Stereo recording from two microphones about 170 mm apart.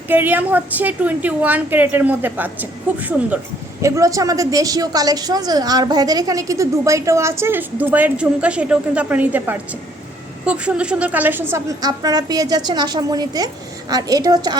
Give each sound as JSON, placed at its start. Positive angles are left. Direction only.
{"t": 0.1, "sound": "a woman's voice", "side_deg": -10}